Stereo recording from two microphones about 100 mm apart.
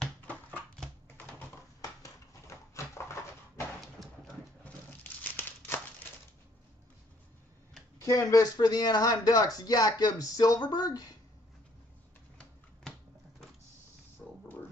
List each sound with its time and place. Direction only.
0.3 s dog: 15° left (ahead or behind)
1.8 s dog: 30° left (ahead or behind)
4.6 s crumpling: 20° left (ahead or behind)
8.0 s speech: 30° left (ahead or behind)